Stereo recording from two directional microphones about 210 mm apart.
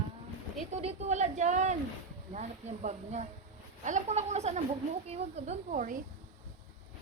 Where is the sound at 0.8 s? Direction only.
30° right (ahead or behind).